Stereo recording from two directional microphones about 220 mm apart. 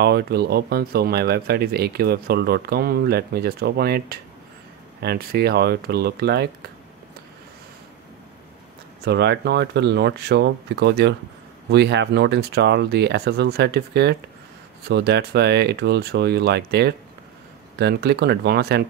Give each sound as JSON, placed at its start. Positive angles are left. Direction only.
{"t": 0.0, "sound": "speech", "side_deg": -45}
{"t": 9.0, "sound": "speech", "side_deg": -50}